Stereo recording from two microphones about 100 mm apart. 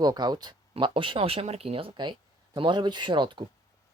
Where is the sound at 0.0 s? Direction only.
45° right (ahead or behind).